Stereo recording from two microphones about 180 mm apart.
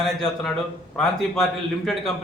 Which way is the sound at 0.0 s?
Centre (ahead or behind).